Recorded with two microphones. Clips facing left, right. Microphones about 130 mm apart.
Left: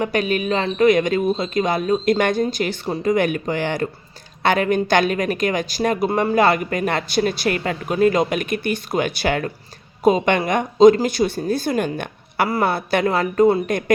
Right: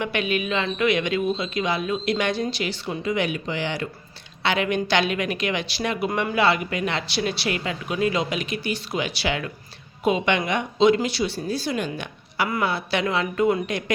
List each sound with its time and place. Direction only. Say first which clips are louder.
0.0 s a man's voice: left 4 dB; 40° left (ahead or behind)